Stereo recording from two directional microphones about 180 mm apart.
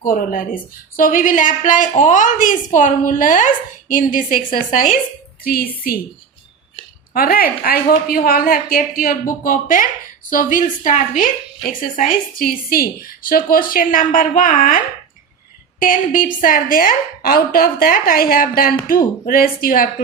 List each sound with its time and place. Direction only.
0.0 s a woman's voice: 50° left (ahead or behind)
7.1 s a woman's voice: 55° left (ahead or behind)
15.8 s a woman's voice: 50° left (ahead or behind)